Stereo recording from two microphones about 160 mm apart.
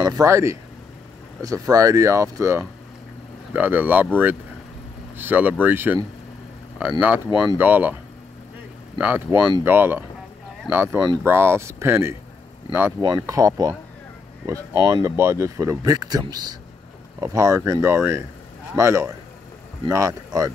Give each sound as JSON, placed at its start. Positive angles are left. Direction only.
{"t": 0.0, "sound": "speech", "side_deg": -20}
{"t": 5.1, "sound": "speech", "side_deg": -10}
{"t": 8.9, "sound": "speech", "side_deg": -10}